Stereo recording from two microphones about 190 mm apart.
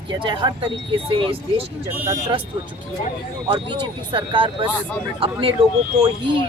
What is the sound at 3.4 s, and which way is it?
Speech, 25° right (ahead or behind).